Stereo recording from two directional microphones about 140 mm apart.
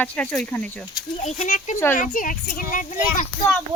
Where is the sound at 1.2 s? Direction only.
55° left (ahead or behind); by 3.2 s 80° left.